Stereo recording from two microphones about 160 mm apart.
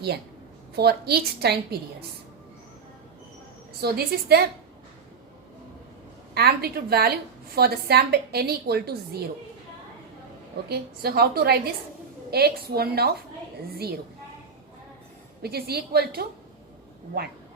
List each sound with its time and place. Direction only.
0.8 s a woman's voice: 85° right
3.8 s a woman's voice: 75° right (ahead or behind)
6.3 s a woman's voice: 75° right (ahead or behind)
10.7 s a woman's voice: 80° right
15.4 s a woman's voice: 75° right (ahead or behind)